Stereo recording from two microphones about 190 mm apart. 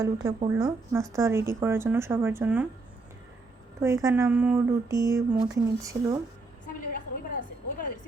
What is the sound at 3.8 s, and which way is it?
Speech, 15° right (ahead or behind).